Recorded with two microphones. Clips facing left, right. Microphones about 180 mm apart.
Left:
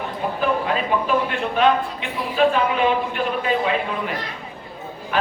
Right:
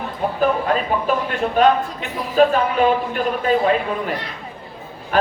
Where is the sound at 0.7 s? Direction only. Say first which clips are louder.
Right 1 dB; 40° right (ahead or behind).